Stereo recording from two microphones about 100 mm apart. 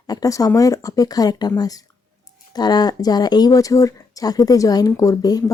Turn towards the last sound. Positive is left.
turn(degrees=40)  # may be behind; listen again after turning